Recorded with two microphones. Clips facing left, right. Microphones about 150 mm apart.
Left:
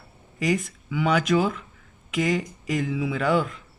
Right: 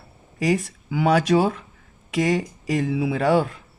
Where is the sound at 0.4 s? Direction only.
35° right (ahead or behind).